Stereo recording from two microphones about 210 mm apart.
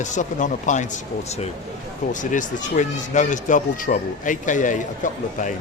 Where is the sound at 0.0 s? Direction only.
35° left (ahead or behind).